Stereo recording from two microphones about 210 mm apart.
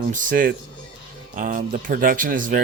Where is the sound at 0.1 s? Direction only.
40° right (ahead or behind).